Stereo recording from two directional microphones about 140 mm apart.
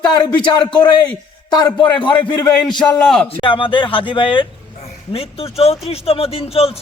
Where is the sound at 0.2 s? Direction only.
30° left (ahead or behind).